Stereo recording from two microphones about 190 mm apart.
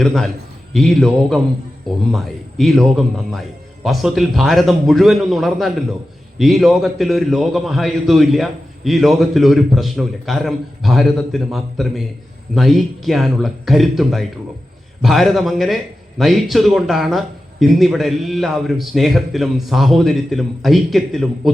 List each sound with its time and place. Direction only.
0.0 s a man's voice: centre (ahead or behind)